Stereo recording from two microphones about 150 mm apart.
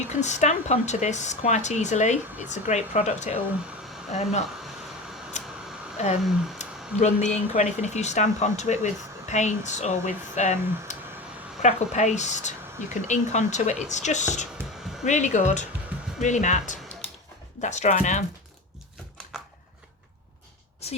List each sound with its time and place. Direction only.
0.0 s speech: 50° left (ahead or behind)
5.4 s a sound: 50° left (ahead or behind)
6.6 s speech: 50° left (ahead or behind)